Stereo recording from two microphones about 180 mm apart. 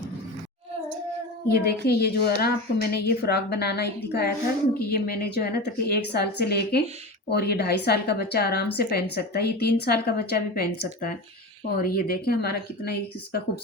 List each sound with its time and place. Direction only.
1.5 s a woman's voice: 60° left (ahead or behind)